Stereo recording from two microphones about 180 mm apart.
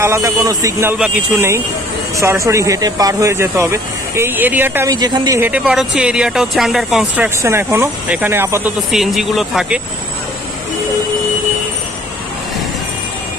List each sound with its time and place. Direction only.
0.0 s speech: 15° right (ahead or behind)
4.9 s a woman's voice: 20° right (ahead or behind)
5.5 s speech: 5° right (ahead or behind)
7.4 s speech: 15° right (ahead or behind)
8.9 s speech: centre (ahead or behind)